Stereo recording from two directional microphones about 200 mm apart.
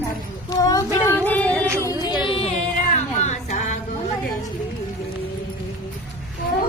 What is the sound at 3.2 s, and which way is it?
Music, 35° left (ahead or behind).